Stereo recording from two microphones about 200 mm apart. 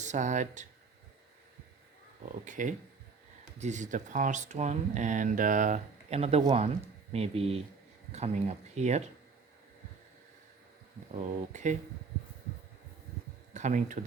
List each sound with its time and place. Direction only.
0.0 s speech: 35° right (ahead or behind)
2.4 s speech: 40° right (ahead or behind)
11.2 s speech: 35° right (ahead or behind)
13.5 s speech: 40° right (ahead or behind)